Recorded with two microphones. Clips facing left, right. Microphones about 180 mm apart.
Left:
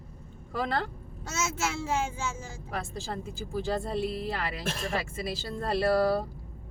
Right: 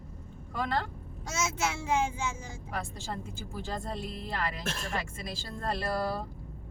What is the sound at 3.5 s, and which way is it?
Speech, centre (ahead or behind).